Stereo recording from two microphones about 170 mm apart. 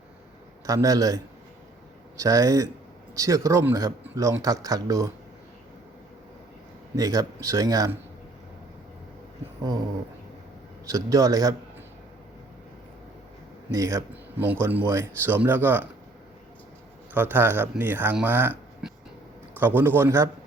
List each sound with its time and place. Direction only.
0.7 s a man's voice: 20° right (ahead or behind)
6.9 s a man's voice: 20° right (ahead or behind)
10.8 s a man's voice: 20° right (ahead or behind)
13.7 s speech: 20° right (ahead or behind)
17.2 s speech: 10° right (ahead or behind)